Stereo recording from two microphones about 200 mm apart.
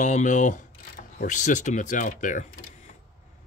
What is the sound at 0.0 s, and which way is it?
Speech, 40° left (ahead or behind).